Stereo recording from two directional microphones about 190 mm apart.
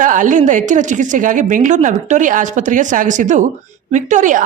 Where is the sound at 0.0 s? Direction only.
45° right (ahead or behind).